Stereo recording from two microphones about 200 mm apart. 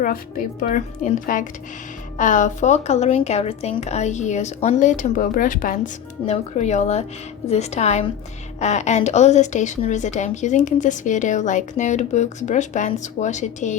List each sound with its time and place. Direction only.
0.0 s speech: 45° left (ahead or behind)